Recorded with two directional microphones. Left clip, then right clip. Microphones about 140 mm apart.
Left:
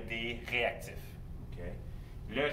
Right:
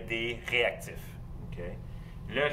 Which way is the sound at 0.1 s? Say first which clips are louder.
Right 5 dB; 25° right (ahead or behind).